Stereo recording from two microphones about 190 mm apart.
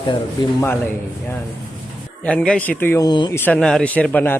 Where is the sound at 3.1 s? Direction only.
25° left (ahead or behind).